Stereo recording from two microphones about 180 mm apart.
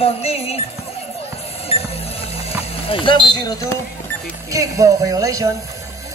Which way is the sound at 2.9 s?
30° left (ahead or behind).